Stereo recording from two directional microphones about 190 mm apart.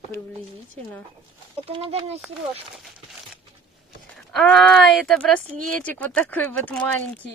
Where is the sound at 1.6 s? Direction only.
30° right (ahead or behind).